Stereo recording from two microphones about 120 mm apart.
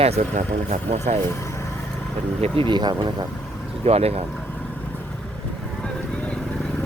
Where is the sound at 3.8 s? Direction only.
60° right (ahead or behind).